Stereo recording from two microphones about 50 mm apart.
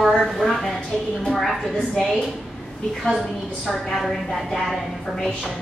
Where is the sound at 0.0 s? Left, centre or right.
Centre.